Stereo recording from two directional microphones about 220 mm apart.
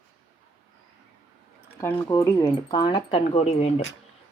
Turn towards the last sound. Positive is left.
turn(degrees=30)  # may be behind; listen again after turning